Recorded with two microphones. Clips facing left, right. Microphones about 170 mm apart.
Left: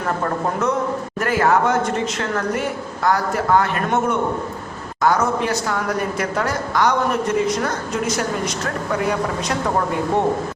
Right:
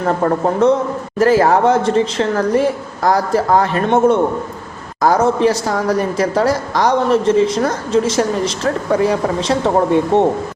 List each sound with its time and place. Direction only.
0.6 s a woman's voice: 30° right (ahead or behind)